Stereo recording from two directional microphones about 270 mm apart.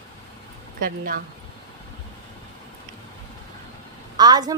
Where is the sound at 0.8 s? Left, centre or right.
Right.